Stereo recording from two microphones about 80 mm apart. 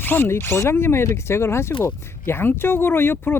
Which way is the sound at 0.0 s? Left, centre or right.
Left.